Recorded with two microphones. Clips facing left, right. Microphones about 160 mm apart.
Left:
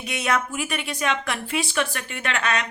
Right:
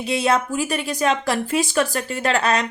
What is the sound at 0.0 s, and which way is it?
Speech, 30° right (ahead or behind).